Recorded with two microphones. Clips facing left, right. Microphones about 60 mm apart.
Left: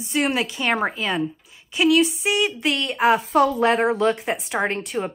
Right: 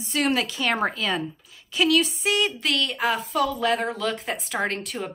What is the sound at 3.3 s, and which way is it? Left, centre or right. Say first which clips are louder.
Speech: left 5 dB; left.